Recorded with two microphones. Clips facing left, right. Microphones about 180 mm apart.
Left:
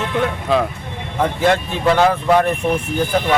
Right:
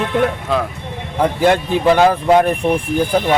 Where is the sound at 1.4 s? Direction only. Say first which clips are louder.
Right 3 dB; 10° right (ahead or behind).